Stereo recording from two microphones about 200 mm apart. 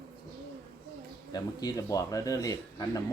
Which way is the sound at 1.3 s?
20° left (ahead or behind).